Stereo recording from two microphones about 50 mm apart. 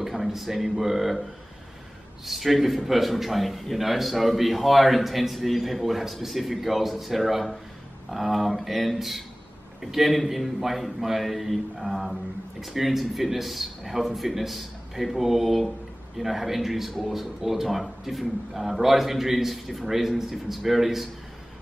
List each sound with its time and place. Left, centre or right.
0.0 s speech: centre
2.2 s a man's voice: centre